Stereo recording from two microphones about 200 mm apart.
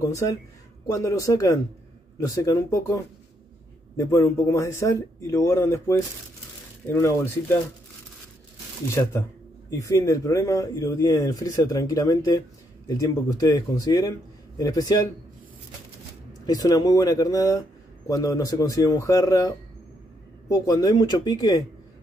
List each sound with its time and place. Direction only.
0.0 s speech: 15° left (ahead or behind)
9.7 s speech: 15° left (ahead or behind)
16.4 s speech: 20° left (ahead or behind)